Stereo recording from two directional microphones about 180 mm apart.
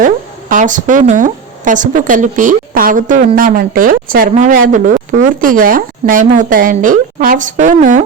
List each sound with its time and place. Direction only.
0.0 s speech: 45° right (ahead or behind)